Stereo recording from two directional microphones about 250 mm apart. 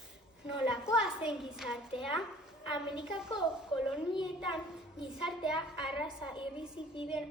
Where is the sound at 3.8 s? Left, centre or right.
Centre.